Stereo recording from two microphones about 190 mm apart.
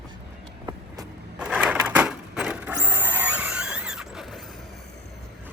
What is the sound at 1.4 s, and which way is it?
Crushing, 5° right (ahead or behind).